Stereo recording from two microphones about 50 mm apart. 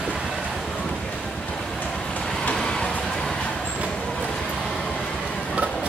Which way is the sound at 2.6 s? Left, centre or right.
Centre.